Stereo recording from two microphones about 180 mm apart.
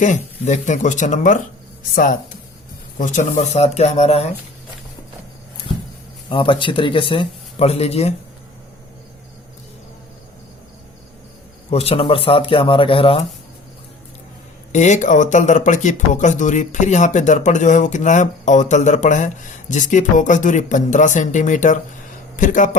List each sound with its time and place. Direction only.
0.0 s speech: 40° left (ahead or behind)
3.0 s speech: 45° left (ahead or behind)
6.2 s speech: 25° left (ahead or behind)
11.7 s speech: 35° left (ahead or behind)
14.7 s speech: 40° left (ahead or behind)